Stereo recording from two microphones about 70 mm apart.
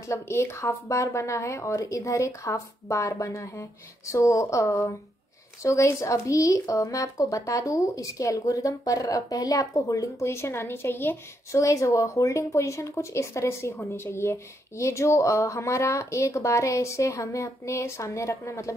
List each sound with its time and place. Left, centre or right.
0.1 s speech: left
11.5 s speech: left